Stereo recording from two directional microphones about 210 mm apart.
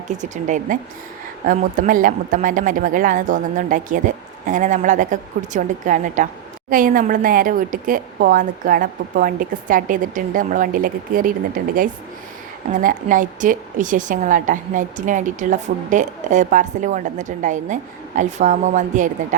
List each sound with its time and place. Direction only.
0.1 s a woman's voice: 35° right (ahead or behind)